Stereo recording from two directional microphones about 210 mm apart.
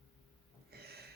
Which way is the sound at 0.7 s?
50° right (ahead or behind).